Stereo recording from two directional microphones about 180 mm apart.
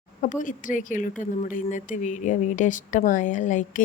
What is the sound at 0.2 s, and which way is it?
Speech, 45° left (ahead or behind).